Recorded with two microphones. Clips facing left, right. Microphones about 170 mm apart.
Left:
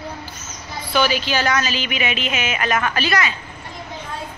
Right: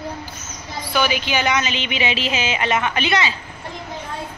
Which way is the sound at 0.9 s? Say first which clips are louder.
Left 1 dB; 15° right (ahead or behind).